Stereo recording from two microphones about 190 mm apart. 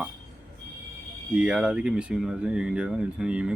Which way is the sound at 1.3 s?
5° right (ahead or behind).